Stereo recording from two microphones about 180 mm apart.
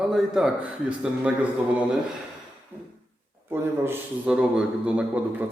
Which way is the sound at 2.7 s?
10° right (ahead or behind).